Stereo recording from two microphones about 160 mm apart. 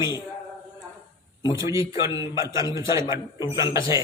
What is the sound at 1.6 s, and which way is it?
A man's voice, 20° right (ahead or behind).